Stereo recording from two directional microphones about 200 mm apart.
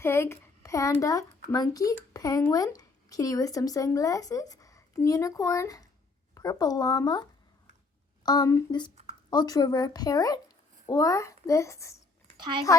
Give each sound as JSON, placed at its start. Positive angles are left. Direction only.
{"t": 0.0, "sound": "speech", "side_deg": 10}